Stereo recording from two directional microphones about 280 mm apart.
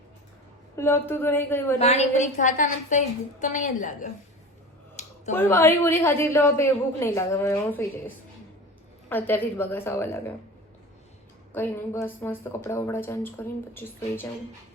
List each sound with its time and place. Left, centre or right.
0.8 s a woman's voice: centre
1.8 s a woman's voice: left
5.0 s a sound: left
5.3 s a woman's voice: centre
11.5 s a woman's voice: centre